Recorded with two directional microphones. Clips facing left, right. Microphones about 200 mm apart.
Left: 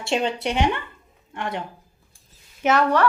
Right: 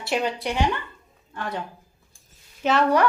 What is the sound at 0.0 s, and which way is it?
A woman's voice, 25° left (ahead or behind).